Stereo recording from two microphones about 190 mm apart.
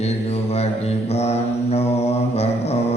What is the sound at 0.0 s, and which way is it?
Mantra, 35° left (ahead or behind).